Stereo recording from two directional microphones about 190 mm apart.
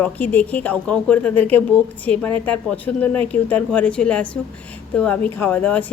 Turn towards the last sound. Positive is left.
turn(degrees=10)  # may be behind; listen again after turning